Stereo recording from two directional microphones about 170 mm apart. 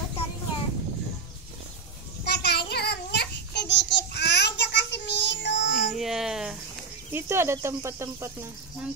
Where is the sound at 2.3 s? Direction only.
75° left (ahead or behind).